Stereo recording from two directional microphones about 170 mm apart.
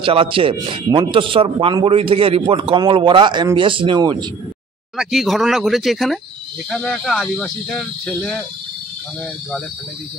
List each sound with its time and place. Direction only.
0.0 s a man's voice: 30° right (ahead or behind)
4.9 s speech: centre (ahead or behind)